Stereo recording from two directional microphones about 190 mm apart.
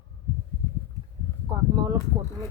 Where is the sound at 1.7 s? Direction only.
20° right (ahead or behind).